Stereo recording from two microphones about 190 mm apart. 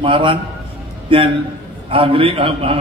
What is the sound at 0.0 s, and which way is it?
A man's voice, 25° right (ahead or behind).